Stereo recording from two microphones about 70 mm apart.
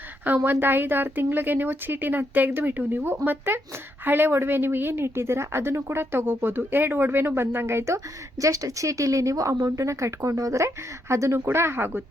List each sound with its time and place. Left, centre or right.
0.4 s a woman's voice: right